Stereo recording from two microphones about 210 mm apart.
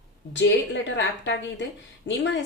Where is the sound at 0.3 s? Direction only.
55° left (ahead or behind).